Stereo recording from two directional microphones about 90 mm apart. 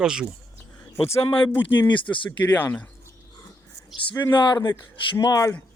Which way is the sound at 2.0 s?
20° left (ahead or behind).